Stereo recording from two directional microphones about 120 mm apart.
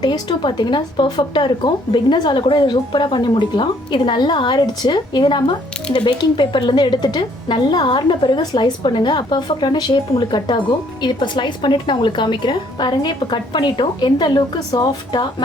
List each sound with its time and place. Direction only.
0.0 s speech: 35° left (ahead or behind)